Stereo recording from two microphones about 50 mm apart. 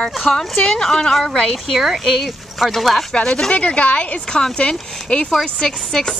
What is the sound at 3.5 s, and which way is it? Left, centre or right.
Speech, left.